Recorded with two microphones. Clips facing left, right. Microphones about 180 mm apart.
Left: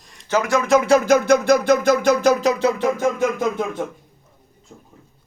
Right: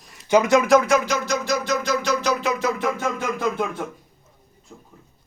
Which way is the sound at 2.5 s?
30° left (ahead or behind).